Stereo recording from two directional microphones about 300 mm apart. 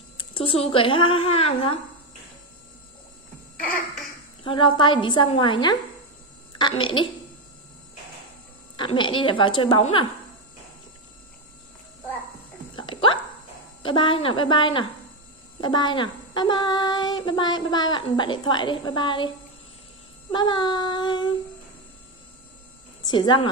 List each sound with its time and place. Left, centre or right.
0.2 s child singing: centre
4.4 s child singing: centre
8.7 s child singing: centre
12.7 s dog: centre
13.8 s child singing: centre
23.0 s child singing: centre